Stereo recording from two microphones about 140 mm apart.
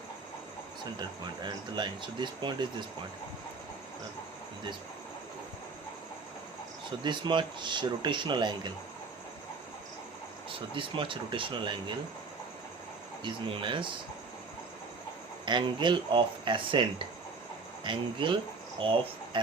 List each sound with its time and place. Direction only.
0.9 s speech: 30° right (ahead or behind)
7.0 s speech: 35° right (ahead or behind)
10.5 s speech: 40° right (ahead or behind)
13.2 s speech: 35° right (ahead or behind)
15.4 s speech: 35° right (ahead or behind)